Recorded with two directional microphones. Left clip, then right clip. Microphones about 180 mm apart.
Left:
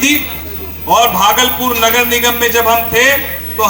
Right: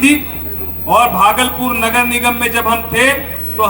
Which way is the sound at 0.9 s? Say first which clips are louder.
Even; 45° right (ahead or behind).